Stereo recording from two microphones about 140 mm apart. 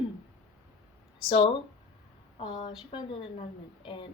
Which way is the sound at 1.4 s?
35° left (ahead or behind).